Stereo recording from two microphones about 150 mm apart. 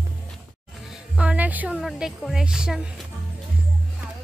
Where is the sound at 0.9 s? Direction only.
5° right (ahead or behind).